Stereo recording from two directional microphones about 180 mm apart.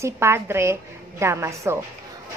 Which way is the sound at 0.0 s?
15° right (ahead or behind).